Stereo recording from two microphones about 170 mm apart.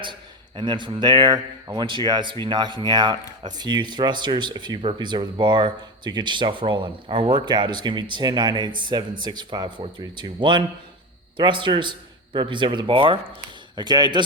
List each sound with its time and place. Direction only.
0.0 s speech: 30° right (ahead or behind)